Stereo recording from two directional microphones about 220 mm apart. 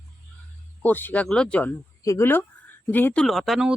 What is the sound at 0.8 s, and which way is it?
Speech, 10° left (ahead or behind).